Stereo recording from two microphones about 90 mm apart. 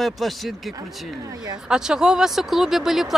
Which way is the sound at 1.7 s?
5° right (ahead or behind).